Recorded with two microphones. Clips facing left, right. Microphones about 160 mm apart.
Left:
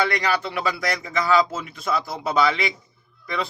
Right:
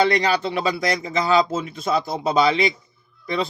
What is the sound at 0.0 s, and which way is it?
Speech, 20° right (ahead or behind).